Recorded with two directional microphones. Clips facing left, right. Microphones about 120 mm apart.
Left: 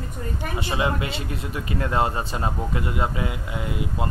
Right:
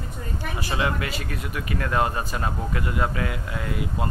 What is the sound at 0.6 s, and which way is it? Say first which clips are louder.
Speech: left 1 dB; 25° left (ahead or behind).